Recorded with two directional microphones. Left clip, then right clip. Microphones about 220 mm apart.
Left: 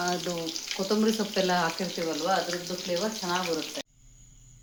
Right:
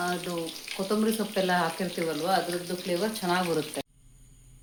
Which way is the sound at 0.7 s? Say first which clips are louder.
Left 1 dB; centre (ahead or behind).